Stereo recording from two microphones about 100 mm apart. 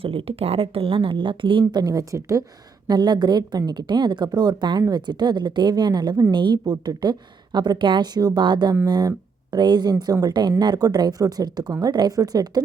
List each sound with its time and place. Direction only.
0.0 s speech: 65° right (ahead or behind); by 2.4 s 35° right (ahead or behind)
2.8 s a woman's voice: 45° right (ahead or behind)